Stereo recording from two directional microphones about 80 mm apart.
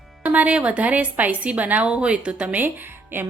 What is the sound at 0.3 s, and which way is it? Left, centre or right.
A woman's voice, centre.